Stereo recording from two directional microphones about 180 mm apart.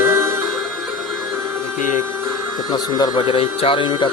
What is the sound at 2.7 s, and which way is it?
Speech, 20° left (ahead or behind).